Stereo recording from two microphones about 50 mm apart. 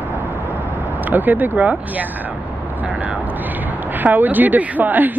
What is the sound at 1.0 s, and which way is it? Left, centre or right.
Speech, right.